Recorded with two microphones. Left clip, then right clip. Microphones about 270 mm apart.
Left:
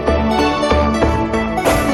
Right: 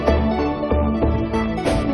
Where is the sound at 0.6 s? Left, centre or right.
Left.